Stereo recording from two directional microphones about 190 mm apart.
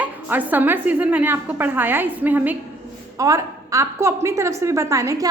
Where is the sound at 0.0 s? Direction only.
10° right (ahead or behind).